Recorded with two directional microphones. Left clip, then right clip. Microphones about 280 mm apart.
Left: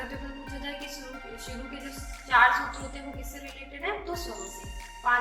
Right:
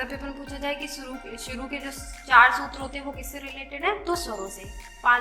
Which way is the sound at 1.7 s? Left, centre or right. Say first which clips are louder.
Right 6 dB; right.